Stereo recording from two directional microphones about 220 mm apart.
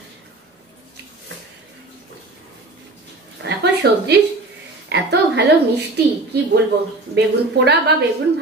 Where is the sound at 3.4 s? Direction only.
50° right (ahead or behind).